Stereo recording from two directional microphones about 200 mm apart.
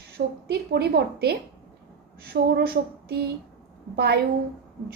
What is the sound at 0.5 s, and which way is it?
A woman's voice, 55° right (ahead or behind).